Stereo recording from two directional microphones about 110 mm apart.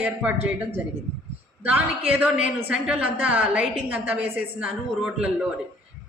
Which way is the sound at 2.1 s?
10° right (ahead or behind).